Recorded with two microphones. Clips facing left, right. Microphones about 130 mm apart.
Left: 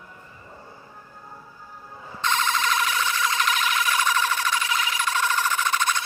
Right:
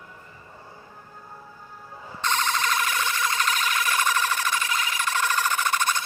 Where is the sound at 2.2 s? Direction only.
50° right (ahead or behind).